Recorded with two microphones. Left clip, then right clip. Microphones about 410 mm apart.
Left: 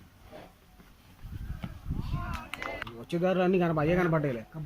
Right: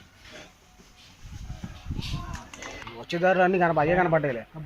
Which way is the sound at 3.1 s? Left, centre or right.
Centre.